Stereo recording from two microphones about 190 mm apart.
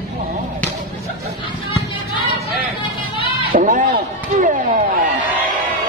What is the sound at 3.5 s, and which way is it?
Speech, 45° right (ahead or behind).